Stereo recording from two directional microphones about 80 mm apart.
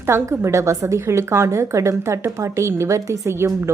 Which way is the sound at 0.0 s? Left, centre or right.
Right.